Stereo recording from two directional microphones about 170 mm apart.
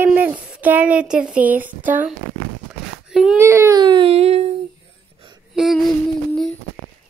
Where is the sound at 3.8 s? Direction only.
30° right (ahead or behind).